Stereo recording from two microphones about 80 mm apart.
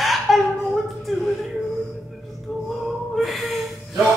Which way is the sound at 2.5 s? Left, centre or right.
Centre.